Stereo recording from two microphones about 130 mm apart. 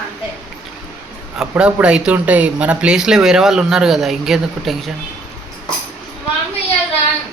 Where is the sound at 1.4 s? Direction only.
10° right (ahead or behind).